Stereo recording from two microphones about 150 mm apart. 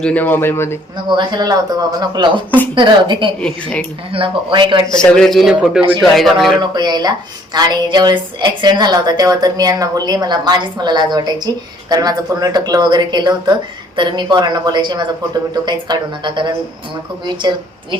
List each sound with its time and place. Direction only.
0.0 s a man's voice: 10° left (ahead or behind)
1.0 s a woman's voice: 30° right (ahead or behind)
3.4 s a man's voice: 5° left (ahead or behind)
4.1 s speech: 35° right (ahead or behind)
5.1 s a man's voice: 5° left (ahead or behind)
6.6 s a woman's voice: 30° right (ahead or behind)